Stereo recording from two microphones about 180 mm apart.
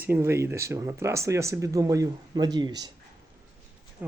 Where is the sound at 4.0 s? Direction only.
10° right (ahead or behind).